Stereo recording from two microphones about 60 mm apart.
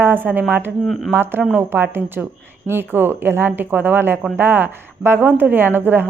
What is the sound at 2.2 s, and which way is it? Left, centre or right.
Speech, centre.